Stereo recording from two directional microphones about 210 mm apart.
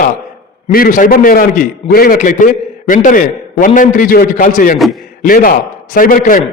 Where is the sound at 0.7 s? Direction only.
40° left (ahead or behind).